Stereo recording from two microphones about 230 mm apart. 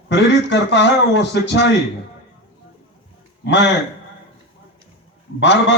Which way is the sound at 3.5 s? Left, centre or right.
Left.